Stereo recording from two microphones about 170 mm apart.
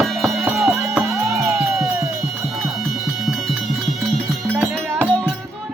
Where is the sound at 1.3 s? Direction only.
15° right (ahead or behind).